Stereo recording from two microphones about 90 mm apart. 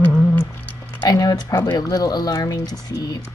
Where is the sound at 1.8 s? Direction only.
45° left (ahead or behind).